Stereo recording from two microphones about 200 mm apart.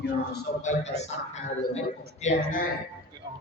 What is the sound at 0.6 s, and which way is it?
A man's voice, 35° left (ahead or behind).